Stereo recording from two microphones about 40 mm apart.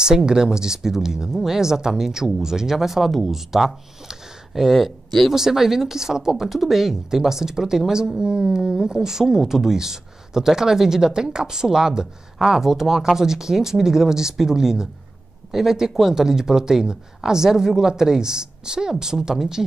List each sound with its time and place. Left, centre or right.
0.0 s speech: centre
5.3 s speech: centre